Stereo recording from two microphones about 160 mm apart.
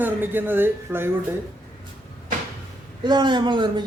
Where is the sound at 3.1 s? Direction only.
25° right (ahead or behind).